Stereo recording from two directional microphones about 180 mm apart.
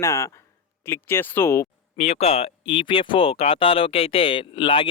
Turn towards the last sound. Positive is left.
turn(degrees=25)  # may be behind; listen again after turning